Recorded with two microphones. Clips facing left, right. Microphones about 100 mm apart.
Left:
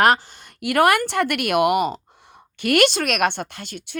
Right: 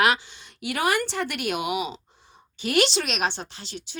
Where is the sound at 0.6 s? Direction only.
60° left (ahead or behind).